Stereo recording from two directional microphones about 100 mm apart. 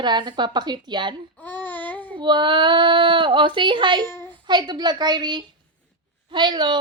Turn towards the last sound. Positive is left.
turn(degrees=-50)  # may be behind; listen again after turning